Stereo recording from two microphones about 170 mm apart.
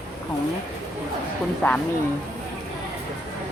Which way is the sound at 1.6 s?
10° left (ahead or behind).